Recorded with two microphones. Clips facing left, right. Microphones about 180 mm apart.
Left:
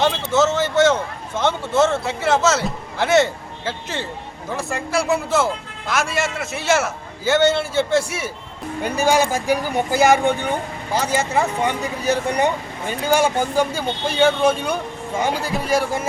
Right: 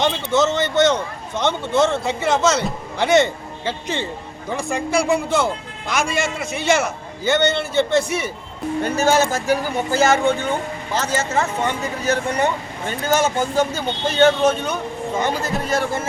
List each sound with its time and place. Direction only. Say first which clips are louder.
0.0 s a man's voice: left 1 dB; 5° left (ahead or behind)